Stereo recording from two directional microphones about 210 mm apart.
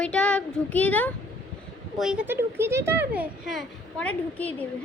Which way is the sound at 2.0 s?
5° right (ahead or behind).